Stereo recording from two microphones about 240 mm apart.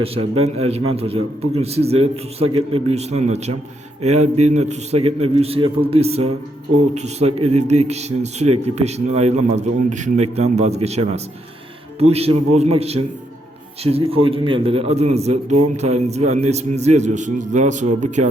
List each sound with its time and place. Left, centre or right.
0.4 s a man's voice: right